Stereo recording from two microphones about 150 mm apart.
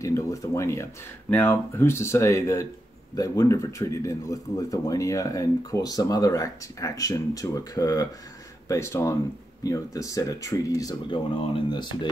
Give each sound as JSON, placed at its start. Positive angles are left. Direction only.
{"t": 0.0, "sound": "speech", "side_deg": 20}